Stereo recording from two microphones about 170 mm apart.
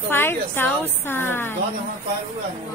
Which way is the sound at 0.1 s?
15° left (ahead or behind).